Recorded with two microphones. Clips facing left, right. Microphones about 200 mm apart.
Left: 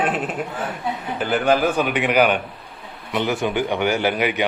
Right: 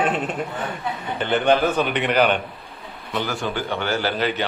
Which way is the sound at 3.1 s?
20° left (ahead or behind).